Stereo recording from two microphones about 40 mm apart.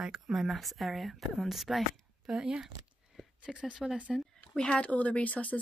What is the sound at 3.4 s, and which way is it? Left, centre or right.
Speech, right.